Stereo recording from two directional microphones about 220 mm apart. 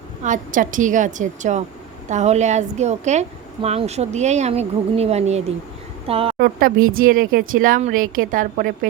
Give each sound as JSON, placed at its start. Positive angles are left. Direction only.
{"t": 0.2, "sound": "a woman's voice", "side_deg": -35}
{"t": 6.3, "sound": "speech", "side_deg": -40}